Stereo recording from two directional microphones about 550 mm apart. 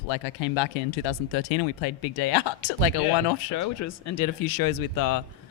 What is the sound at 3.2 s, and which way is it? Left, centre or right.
Speech, left.